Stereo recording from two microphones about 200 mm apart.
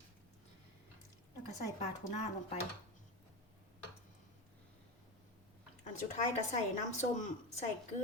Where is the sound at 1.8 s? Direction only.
35° left (ahead or behind).